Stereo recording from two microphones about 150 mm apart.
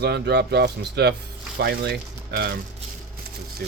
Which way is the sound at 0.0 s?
90° right.